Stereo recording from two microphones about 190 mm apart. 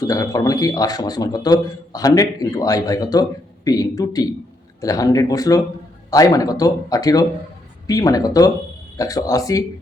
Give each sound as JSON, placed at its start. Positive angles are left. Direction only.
{"t": 0.1, "sound": "a man's voice", "side_deg": 20}